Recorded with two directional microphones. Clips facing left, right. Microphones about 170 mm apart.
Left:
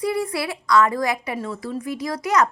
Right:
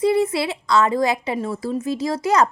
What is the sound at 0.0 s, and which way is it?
A woman's voice, 25° right (ahead or behind).